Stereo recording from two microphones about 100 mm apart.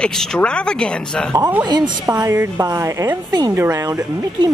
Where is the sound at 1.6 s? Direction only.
50° right (ahead or behind).